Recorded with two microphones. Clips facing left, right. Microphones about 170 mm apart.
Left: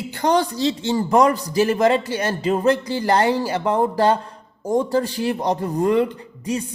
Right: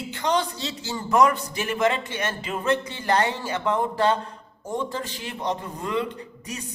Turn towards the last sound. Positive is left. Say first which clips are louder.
# left 10 dB
turn(degrees=30)  # may be behind; listen again after turning